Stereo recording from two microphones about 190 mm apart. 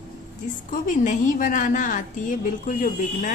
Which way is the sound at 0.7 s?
45° left (ahead or behind).